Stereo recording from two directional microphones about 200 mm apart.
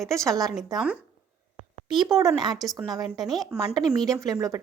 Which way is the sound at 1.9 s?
20° right (ahead or behind).